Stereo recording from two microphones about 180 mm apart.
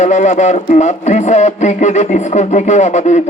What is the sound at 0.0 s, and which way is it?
Speech, 40° left (ahead or behind).